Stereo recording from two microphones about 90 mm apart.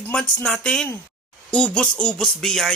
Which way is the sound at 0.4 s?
10° left (ahead or behind).